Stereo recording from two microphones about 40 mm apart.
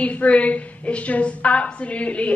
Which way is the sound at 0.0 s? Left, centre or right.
Left.